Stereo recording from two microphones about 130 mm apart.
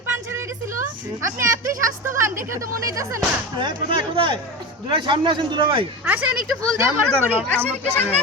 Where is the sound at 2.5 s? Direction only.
25° right (ahead or behind).